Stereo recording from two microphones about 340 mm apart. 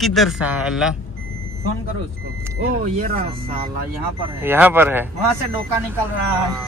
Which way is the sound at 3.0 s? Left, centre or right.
Right.